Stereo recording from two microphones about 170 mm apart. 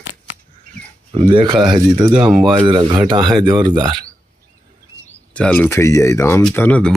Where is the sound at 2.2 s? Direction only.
Centre (ahead or behind).